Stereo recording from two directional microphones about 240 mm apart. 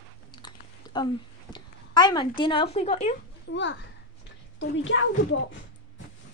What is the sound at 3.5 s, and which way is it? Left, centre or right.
Speech, left.